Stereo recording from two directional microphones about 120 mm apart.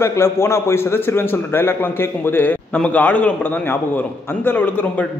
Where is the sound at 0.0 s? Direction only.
20° left (ahead or behind).